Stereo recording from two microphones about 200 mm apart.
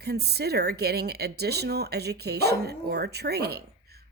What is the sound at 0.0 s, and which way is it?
Speech, 55° right (ahead or behind).